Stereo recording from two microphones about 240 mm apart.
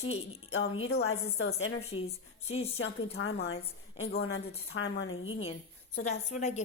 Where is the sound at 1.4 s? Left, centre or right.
Left.